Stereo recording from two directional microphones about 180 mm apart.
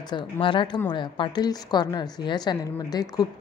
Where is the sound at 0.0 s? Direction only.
25° left (ahead or behind).